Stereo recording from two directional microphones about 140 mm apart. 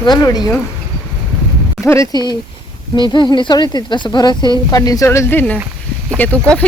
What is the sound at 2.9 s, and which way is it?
Speech, 35° left (ahead or behind).